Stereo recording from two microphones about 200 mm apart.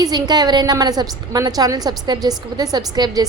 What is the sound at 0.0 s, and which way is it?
A woman's voice, 20° right (ahead or behind).